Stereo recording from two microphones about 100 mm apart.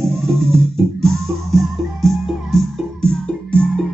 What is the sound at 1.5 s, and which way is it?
Music, centre (ahead or behind).